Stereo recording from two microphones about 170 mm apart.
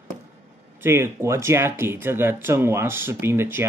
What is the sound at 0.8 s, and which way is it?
Speech, 15° right (ahead or behind).